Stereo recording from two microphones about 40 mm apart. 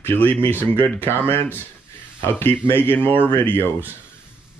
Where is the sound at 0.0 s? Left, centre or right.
Left.